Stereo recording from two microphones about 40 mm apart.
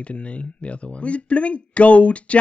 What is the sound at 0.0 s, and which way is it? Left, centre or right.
Speech, left.